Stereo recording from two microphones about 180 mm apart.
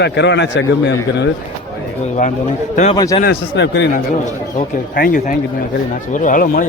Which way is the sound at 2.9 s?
20° left (ahead or behind).